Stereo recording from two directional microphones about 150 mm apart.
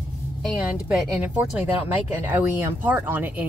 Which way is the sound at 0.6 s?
5° right (ahead or behind).